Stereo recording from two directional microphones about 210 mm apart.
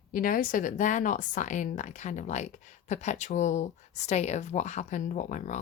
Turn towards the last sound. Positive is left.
turn(degrees=35)  # may be behind; listen again after turning